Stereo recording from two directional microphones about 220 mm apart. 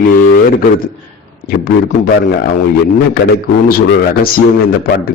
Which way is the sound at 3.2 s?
45° left (ahead or behind).